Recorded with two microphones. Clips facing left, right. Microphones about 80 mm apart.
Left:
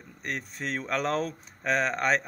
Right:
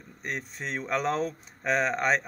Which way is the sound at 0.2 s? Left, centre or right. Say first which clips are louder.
Left 1 dB; right.